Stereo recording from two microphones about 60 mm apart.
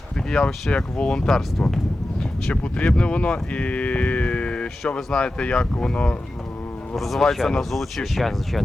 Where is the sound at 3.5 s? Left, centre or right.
Left.